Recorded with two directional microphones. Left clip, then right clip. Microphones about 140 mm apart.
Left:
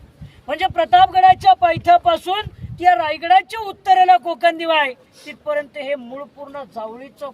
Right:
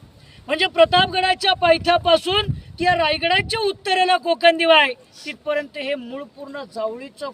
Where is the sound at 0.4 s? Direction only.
5° left (ahead or behind).